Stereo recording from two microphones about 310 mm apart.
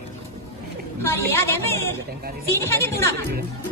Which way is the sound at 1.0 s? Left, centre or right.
Centre.